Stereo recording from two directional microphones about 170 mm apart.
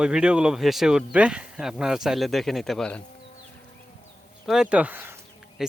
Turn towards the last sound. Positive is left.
turn(degrees=0)  # may be behind; listen again after turning